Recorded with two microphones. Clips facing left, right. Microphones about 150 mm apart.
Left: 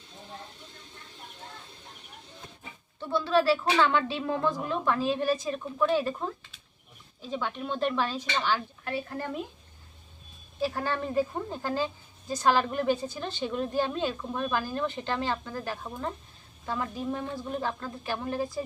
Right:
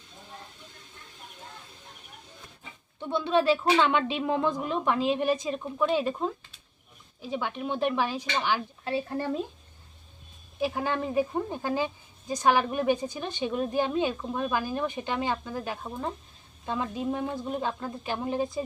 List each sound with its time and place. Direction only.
3.0 s a woman's voice: 20° right (ahead or behind)
8.8 s a woman's voice: 25° right (ahead or behind)
10.6 s a woman's voice: 15° right (ahead or behind)